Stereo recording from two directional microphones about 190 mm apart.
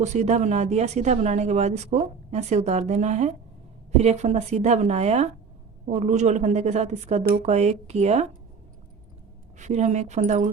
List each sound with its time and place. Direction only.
0.0 s a woman's voice: 35° right (ahead or behind)
9.6 s a woman's voice: 40° right (ahead or behind)